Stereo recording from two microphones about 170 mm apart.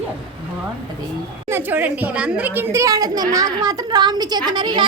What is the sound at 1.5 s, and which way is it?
A child's voice, 10° right (ahead or behind).